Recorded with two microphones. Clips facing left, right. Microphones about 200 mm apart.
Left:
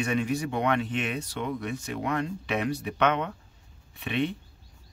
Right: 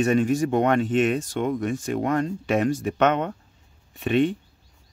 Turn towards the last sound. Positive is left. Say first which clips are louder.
# right 8 dB
turn(degrees=-45)  # may be behind; listen again after turning